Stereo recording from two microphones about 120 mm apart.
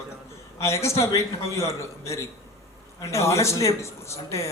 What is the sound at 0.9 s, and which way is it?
A man's voice, 25° left (ahead or behind).